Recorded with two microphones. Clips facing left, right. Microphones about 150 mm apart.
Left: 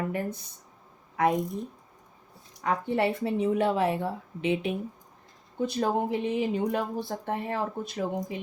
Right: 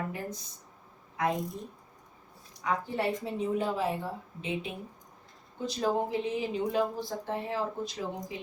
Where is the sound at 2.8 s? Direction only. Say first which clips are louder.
Left 5 dB; 65° left (ahead or behind).